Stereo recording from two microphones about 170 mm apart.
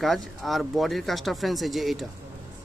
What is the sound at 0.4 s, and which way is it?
Speech, centre (ahead or behind).